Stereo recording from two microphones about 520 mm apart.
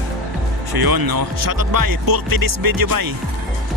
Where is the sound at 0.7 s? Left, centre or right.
Right.